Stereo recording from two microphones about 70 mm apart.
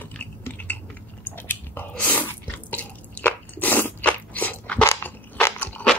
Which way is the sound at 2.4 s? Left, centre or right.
Left.